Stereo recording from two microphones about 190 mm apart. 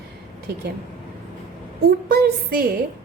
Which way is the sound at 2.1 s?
55° right (ahead or behind).